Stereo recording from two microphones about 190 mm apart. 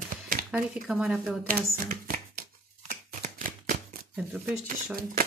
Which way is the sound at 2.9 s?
45° right (ahead or behind).